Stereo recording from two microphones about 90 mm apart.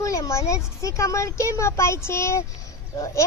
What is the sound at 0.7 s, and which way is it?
A child's voice, 35° left (ahead or behind).